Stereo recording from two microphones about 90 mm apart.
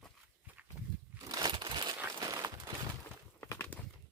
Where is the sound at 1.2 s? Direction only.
50° right (ahead or behind).